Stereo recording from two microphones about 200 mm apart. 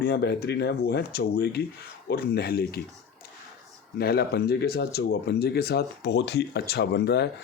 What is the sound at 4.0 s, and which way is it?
Speech, 50° left (ahead or behind).